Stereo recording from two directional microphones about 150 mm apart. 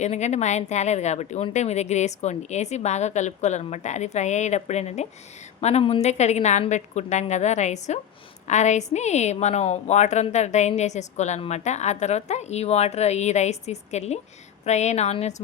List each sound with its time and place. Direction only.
0.0 s a woman's voice: 50° left (ahead or behind)